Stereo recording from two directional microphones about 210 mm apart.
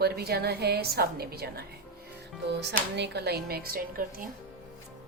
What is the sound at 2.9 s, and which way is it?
A woman's voice, 55° right (ahead or behind).